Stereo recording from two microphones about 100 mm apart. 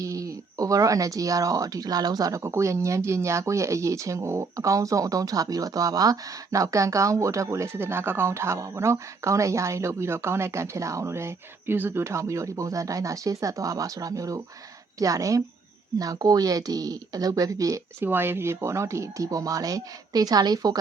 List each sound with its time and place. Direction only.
0.0 s speech: 35° right (ahead or behind)
18.0 s speech: 20° right (ahead or behind); by 20.7 s 40° right (ahead or behind)